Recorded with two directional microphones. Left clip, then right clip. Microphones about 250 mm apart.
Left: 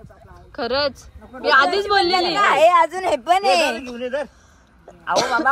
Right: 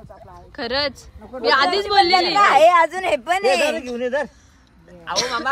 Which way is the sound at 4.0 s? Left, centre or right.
Right.